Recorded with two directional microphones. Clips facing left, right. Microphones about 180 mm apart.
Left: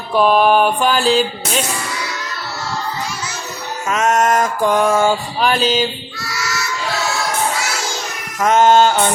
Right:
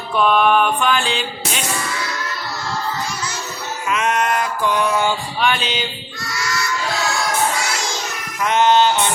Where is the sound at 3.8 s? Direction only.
45° left (ahead or behind).